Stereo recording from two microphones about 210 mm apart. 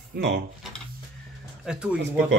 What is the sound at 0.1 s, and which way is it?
Speech, 50° right (ahead or behind).